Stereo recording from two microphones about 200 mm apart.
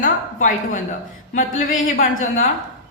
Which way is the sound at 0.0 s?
40° left (ahead or behind).